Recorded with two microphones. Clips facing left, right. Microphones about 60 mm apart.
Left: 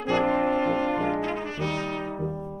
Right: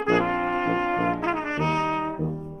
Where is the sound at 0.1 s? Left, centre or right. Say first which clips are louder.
Left 1 dB; right.